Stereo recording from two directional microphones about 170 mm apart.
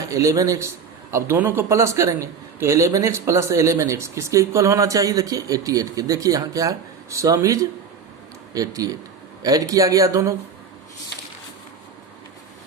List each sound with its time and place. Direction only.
0.0 s a man's voice: 20° right (ahead or behind)